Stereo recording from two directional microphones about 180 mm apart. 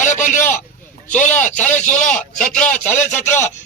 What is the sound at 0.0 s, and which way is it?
Vehicle, 45° left (ahead or behind).